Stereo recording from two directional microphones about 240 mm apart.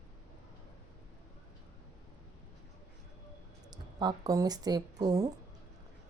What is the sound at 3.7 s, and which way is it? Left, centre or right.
Speech, centre.